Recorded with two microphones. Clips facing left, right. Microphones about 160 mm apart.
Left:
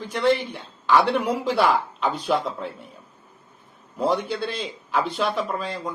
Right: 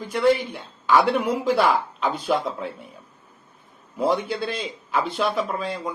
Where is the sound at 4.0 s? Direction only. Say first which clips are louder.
Right 1 dB; 5° right (ahead or behind).